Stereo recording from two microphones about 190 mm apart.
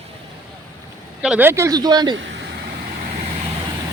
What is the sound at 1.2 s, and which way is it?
Speech, 10° right (ahead or behind).